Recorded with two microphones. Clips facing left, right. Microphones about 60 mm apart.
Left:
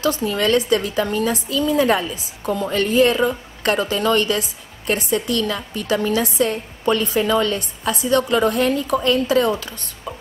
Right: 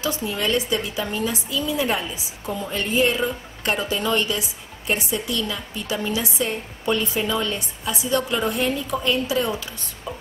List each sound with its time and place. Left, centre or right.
0.0 s a woman's voice: left